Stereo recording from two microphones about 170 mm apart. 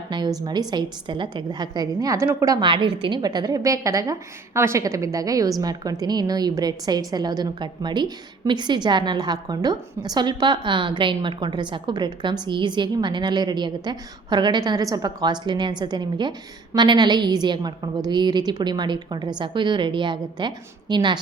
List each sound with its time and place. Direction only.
0.1 s a woman's voice: 25° right (ahead or behind)